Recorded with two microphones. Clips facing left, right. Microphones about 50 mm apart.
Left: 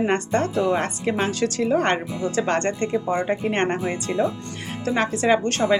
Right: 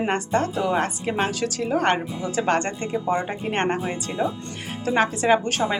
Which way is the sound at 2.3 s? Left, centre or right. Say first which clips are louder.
Right 1 dB; centre.